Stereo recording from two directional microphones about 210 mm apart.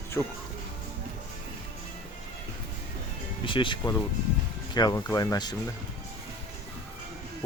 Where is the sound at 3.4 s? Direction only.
25° left (ahead or behind).